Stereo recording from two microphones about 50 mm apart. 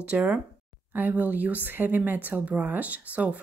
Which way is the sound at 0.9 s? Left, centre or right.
Right.